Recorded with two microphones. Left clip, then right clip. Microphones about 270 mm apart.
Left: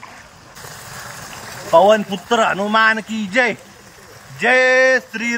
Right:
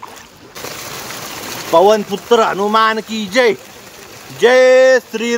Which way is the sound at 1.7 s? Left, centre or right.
Centre.